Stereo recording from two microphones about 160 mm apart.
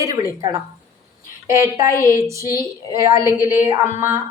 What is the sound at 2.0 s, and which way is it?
A woman's voice, 20° right (ahead or behind).